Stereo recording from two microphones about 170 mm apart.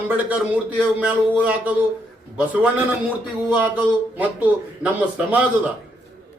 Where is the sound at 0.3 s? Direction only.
10° right (ahead or behind).